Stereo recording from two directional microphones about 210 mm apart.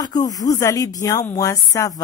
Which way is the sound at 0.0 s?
20° left (ahead or behind).